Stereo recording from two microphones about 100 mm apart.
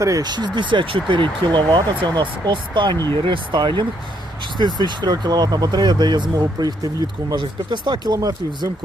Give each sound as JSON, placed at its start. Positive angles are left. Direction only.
{"t": 0.0, "sound": "speech", "side_deg": -40}
{"t": 2.9, "sound": "speech", "side_deg": 30}
{"t": 3.2, "sound": "speech", "side_deg": -55}